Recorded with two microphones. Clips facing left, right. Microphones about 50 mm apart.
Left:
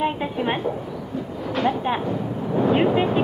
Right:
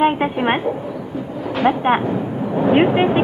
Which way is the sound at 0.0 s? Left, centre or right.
Right.